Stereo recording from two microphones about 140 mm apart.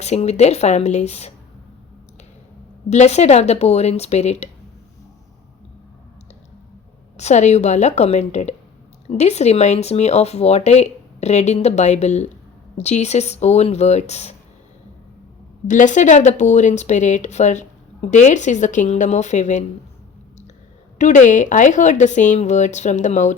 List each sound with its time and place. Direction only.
0.0 s speech: 50° left (ahead or behind)
2.9 s speech: 55° left (ahead or behind)
7.2 s speech: 55° left (ahead or behind)
15.6 s speech: 65° left (ahead or behind)
21.0 s speech: 60° left (ahead or behind)